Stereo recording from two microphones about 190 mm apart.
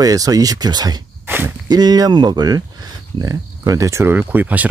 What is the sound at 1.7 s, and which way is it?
Speech, 20° right (ahead or behind).